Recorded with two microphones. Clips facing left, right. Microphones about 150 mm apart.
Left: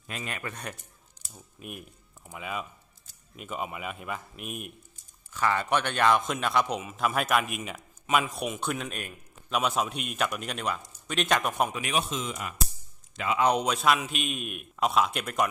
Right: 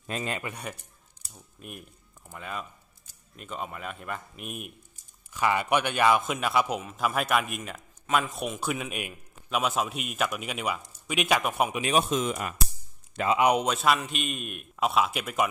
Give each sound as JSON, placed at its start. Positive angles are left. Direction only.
{"t": 0.0, "sound": "a man's voice", "side_deg": -35}
{"t": 0.4, "sound": "speech", "side_deg": -15}
{"t": 1.3, "sound": "speech", "side_deg": 5}
{"t": 5.3, "sound": "speech", "side_deg": -10}
{"t": 11.9, "sound": "speech", "side_deg": -50}
{"t": 13.4, "sound": "speech", "side_deg": -10}
{"t": 13.7, "sound": "speech", "side_deg": 0}